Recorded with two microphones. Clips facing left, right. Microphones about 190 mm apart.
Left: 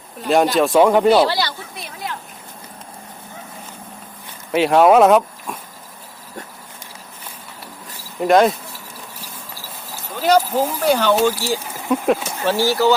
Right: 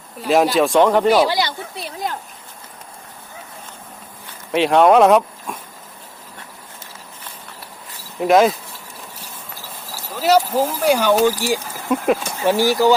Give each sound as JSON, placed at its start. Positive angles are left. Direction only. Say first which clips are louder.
{"t": 0.2, "sound": "speech", "louder": "even", "side_deg": 0}
{"t": 1.0, "sound": "speech", "louder": "left 1 dB", "side_deg": -10}
{"t": 1.7, "sound": "speech", "louder": "right 4 dB", "side_deg": -35}
{"t": 4.5, "sound": "speech", "louder": "even", "side_deg": 0}
{"t": 8.2, "sound": "speech", "louder": "even", "side_deg": 0}
{"t": 9.6, "sound": "speech", "louder": "right 1 dB", "side_deg": -5}
{"t": 11.9, "sound": "speech", "louder": "even", "side_deg": 0}
{"t": 12.4, "sound": "speech", "louder": "right 2 dB", "side_deg": -15}